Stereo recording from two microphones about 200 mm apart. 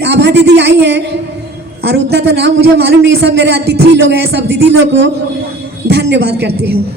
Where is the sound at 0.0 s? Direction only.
60° right (ahead or behind).